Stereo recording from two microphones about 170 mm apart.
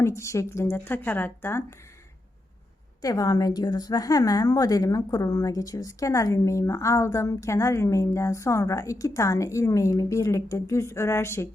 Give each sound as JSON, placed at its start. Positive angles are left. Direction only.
{"t": 0.0, "sound": "a woman's voice", "side_deg": 15}
{"t": 3.0, "sound": "a woman's voice", "side_deg": 20}